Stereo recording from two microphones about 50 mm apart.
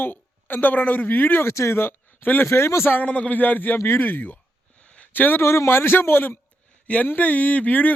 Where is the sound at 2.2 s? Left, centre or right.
Left.